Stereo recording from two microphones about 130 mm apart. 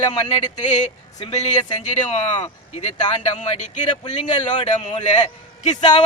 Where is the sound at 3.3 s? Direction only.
65° left (ahead or behind).